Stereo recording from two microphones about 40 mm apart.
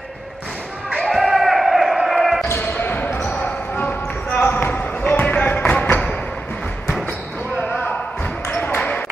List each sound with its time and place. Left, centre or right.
1.1 s a sound: centre
2.4 s basketball bounce: left
2.7 s a sound: left
3.3 s basketball bounce: left
4.4 s basketball bounce: left
5.5 s music: left
7.5 s basketball bounce: left